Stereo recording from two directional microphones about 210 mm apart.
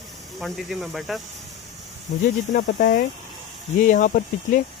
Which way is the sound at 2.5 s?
40° left (ahead or behind).